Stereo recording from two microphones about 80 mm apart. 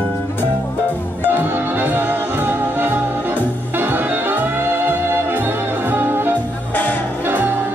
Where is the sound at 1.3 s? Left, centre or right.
Right.